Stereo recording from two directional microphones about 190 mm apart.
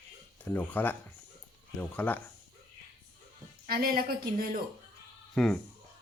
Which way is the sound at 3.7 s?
50° right (ahead or behind).